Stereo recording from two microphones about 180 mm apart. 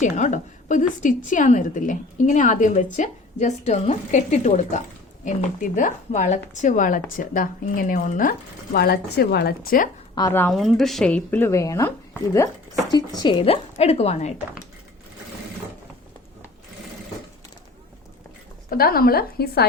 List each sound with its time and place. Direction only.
0.0 s a woman's voice: 45° left (ahead or behind)
10.2 s speech: 15° left (ahead or behind)
10.5 s speech: centre (ahead or behind); by 14.3 s 40° left (ahead or behind)
18.7 s a woman's voice: 55° left (ahead or behind)